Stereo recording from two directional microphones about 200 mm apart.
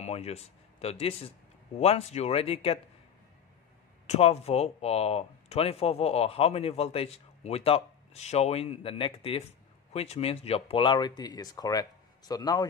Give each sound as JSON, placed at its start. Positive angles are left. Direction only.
{"t": 0.0, "sound": "speech", "side_deg": 30}
{"t": 4.1, "sound": "speech", "side_deg": 30}